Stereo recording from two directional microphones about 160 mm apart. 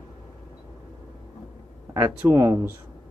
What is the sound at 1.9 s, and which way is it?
Speech, 10° right (ahead or behind).